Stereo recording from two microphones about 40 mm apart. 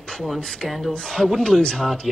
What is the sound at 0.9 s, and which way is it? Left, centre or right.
Speech, centre.